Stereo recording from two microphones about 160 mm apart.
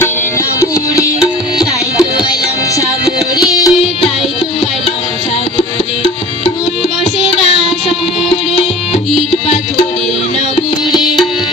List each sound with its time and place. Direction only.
1.5 s music: 25° left (ahead or behind)
3.3 s music: 25° left (ahead or behind)